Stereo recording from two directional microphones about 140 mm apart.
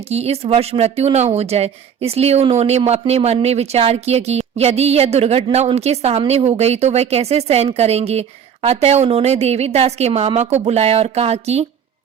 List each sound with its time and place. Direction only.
0.1 s speech: 50° right (ahead or behind)